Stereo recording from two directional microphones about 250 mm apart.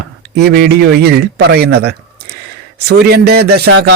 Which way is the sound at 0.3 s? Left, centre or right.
Right.